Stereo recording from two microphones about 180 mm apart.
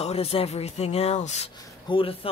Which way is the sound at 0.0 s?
35° left (ahead or behind).